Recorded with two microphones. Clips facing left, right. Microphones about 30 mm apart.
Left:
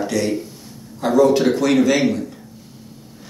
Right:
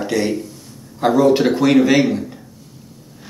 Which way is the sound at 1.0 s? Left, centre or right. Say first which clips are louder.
Right 1 dB; centre.